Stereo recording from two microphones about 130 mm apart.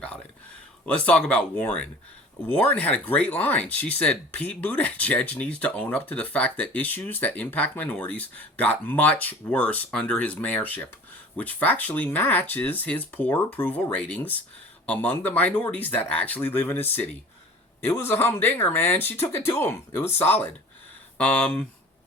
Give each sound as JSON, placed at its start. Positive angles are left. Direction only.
{"t": 0.9, "sound": "speech", "side_deg": 10}